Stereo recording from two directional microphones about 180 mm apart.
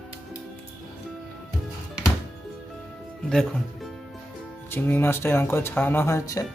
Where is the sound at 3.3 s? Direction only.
5° left (ahead or behind).